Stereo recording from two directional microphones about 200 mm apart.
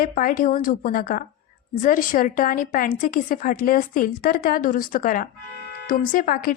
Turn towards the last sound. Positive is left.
turn(degrees=45)  # may be behind; listen again after turning